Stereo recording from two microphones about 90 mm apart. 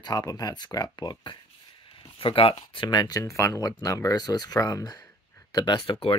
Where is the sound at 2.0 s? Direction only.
75° left (ahead or behind).